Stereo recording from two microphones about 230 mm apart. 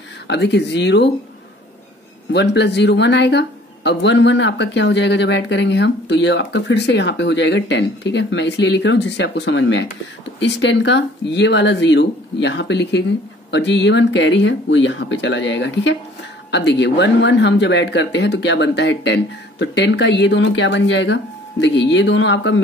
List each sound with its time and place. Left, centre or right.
0.3 s speech: left
2.3 s speech: left